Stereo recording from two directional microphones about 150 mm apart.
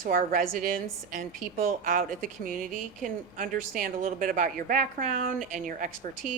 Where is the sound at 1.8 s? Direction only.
65° right (ahead or behind).